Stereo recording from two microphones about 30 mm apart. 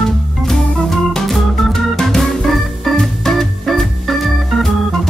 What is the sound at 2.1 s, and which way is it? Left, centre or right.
Organ, centre.